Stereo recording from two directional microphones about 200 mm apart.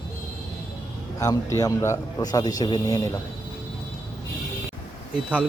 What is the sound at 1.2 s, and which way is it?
A man's voice, 15° left (ahead or behind).